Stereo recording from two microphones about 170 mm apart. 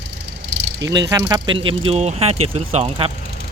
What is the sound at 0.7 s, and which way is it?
Speech, 20° right (ahead or behind).